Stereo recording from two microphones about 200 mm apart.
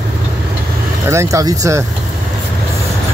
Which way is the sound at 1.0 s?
15° right (ahead or behind).